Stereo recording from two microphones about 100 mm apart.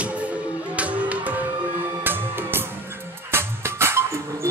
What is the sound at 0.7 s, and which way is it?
Music, 15° right (ahead or behind).